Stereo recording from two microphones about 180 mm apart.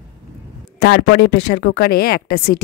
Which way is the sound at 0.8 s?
65° left (ahead or behind).